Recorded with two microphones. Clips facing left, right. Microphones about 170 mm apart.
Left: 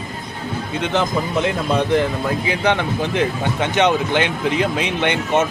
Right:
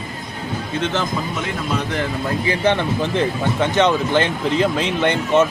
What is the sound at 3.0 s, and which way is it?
Speech, 15° left (ahead or behind).